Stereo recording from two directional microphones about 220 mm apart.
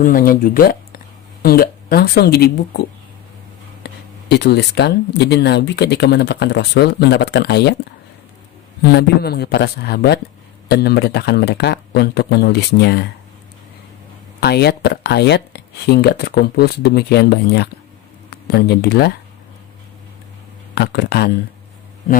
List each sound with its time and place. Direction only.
0.0 s speech: 40° left (ahead or behind)
3.8 s a sound: 50° left (ahead or behind)
4.3 s speech: 50° left (ahead or behind)
8.8 s speech: 45° left (ahead or behind)
14.4 s speech: 45° left (ahead or behind)
20.7 s speech: 50° left (ahead or behind)